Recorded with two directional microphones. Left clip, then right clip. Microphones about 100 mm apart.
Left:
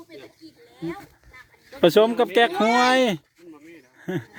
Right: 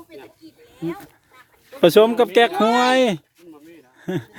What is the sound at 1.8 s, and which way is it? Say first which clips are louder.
Speech: right 4 dB; 20° right (ahead or behind).